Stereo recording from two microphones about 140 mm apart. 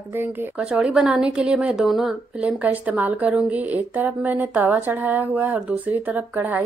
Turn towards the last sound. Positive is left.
turn(degrees=-10)  # may be behind; listen again after turning